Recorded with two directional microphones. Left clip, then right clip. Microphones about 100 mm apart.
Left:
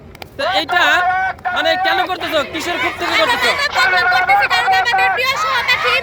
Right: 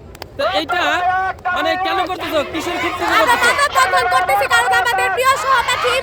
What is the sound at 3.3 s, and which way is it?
Speech, 70° right (ahead or behind).